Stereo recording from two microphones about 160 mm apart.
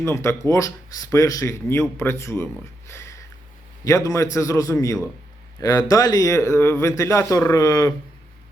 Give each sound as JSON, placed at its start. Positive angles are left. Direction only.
{"t": 0.0, "sound": "a man's voice", "side_deg": 15}